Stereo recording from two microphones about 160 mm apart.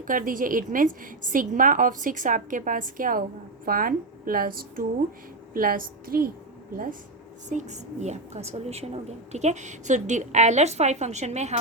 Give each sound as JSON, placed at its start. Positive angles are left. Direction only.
{"t": 0.0, "sound": "a woman's voice", "side_deg": -60}
{"t": 7.5, "sound": "a woman's voice", "side_deg": -45}